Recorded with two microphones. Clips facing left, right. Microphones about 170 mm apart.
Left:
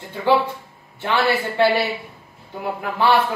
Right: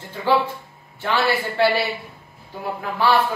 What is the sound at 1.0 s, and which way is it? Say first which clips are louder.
A man's voice: left 1 dB; 20° left (ahead or behind).